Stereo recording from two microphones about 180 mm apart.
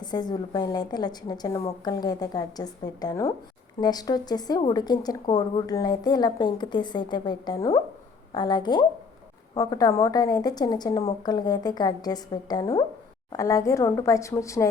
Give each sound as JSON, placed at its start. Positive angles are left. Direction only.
{"t": 0.0, "sound": "a woman's voice", "side_deg": 25}